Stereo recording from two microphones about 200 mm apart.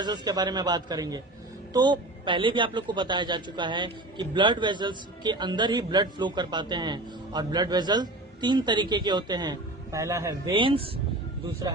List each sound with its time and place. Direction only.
0.0 s a man's voice: 20° right (ahead or behind)